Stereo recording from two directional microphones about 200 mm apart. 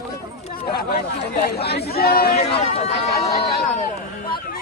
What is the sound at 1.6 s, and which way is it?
Speech, 50° left (ahead or behind).